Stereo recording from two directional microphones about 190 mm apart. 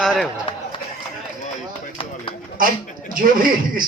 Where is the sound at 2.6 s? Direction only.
45° right (ahead or behind).